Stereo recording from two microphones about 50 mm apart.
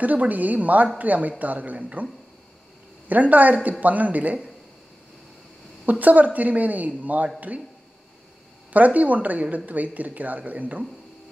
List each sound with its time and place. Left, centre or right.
0.0 s a woman's voice: right
3.1 s a woman's voice: right
5.9 s a woman's voice: right
8.7 s a woman's voice: right